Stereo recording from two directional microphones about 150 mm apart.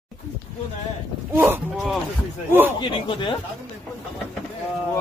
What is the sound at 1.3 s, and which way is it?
Speech, 15° right (ahead or behind).